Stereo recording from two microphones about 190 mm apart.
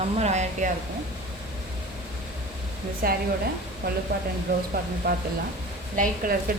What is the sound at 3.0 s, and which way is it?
Speech, 50° right (ahead or behind).